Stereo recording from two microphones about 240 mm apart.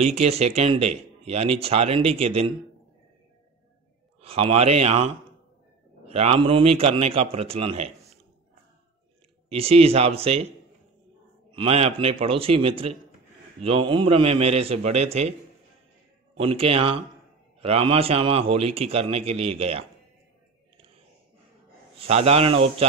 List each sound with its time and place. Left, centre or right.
0.0 s speech: right
4.2 s speech: right
9.5 s speech: right
11.5 s speech: right
16.3 s speech: right
20.7 s a sound: right
21.9 s speech: right